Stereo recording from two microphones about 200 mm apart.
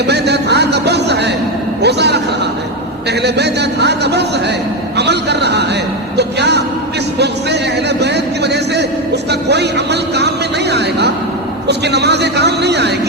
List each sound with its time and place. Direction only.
0.0 s music: 55° right (ahead or behind)
1.8 s a man's voice: 55° right (ahead or behind)
7.2 s a sound: 55° right (ahead or behind)
11.7 s a man's voice: 55° right (ahead or behind)